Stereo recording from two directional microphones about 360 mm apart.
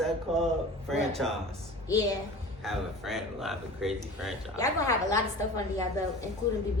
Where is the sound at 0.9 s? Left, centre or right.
Centre.